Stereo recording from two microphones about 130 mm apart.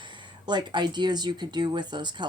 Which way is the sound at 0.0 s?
35° right (ahead or behind).